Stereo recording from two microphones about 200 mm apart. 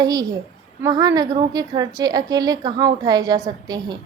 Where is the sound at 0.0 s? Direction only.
20° right (ahead or behind).